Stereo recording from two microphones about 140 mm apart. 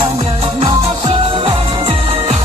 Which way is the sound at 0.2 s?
45° right (ahead or behind).